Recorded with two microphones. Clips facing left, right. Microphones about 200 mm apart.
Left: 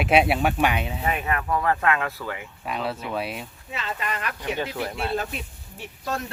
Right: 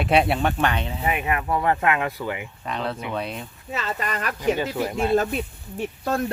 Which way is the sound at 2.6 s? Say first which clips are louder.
Even; 5° left (ahead or behind).